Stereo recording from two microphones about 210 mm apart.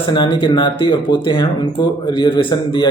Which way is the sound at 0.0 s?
20° left (ahead or behind).